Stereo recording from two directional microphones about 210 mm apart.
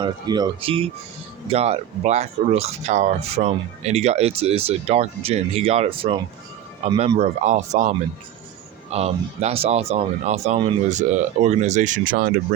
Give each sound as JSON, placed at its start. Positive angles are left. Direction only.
{"t": 0.0, "sound": "speech", "side_deg": -20}